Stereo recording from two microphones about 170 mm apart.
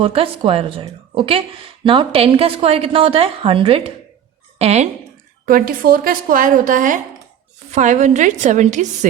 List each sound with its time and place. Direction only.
0.0 s a woman's voice: 35° right (ahead or behind)
5.5 s a woman's voice: 55° right (ahead or behind)